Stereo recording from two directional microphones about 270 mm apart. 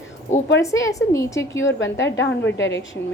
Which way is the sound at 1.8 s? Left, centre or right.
Left.